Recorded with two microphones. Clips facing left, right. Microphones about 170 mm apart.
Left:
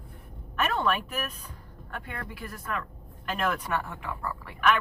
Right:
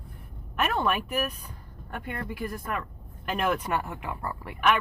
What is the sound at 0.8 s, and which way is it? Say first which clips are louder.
Speech: even; 15° right (ahead or behind).